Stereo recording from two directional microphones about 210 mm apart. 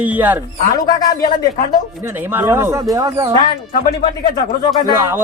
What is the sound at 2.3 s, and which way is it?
Speech, 10° right (ahead or behind).